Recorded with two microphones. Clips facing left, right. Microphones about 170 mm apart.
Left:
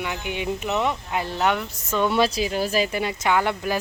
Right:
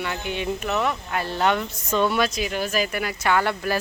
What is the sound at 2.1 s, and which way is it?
Speech, 30° left (ahead or behind).